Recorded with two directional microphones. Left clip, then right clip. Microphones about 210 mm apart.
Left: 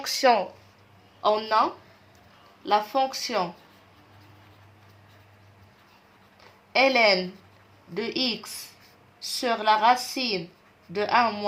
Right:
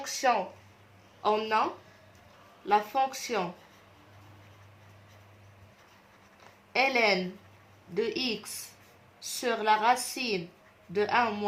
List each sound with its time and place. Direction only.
0.0 s a woman's voice: 50° left (ahead or behind)
1.2 s a woman's voice: 30° left (ahead or behind)
2.6 s a woman's voice: 30° left (ahead or behind)
6.7 s a woman's voice: 30° left (ahead or behind)